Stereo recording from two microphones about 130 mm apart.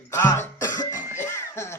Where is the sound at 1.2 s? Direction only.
20° left (ahead or behind).